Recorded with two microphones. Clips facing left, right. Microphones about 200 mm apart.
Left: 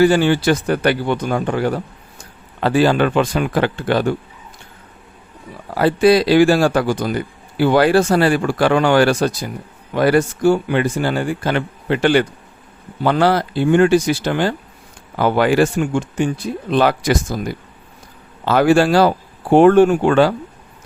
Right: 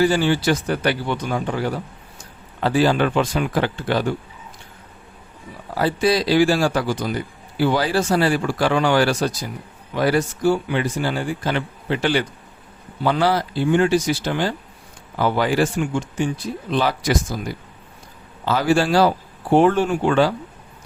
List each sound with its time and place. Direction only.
0.0 s speech: 60° left (ahead or behind)
5.7 s speech: 60° left (ahead or behind)
18.4 s speech: 55° left (ahead or behind)